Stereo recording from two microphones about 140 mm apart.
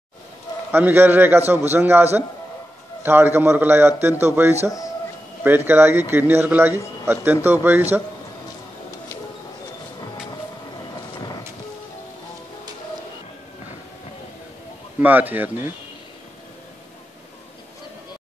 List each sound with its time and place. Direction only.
0.7 s speech: 15° right (ahead or behind)
15.0 s speech: 10° right (ahead or behind)